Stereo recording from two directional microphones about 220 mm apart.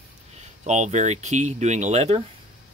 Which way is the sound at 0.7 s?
30° right (ahead or behind).